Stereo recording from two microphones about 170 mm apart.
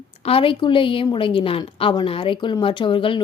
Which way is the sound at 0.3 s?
30° left (ahead or behind).